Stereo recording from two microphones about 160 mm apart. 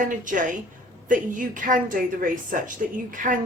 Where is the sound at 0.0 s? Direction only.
55° right (ahead or behind).